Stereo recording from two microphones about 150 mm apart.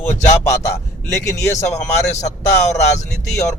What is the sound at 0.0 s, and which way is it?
A man's voice, 20° left (ahead or behind).